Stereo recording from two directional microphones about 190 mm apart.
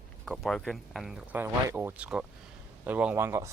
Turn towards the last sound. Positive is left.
turn(degrees=-15)  # may be behind; listen again after turning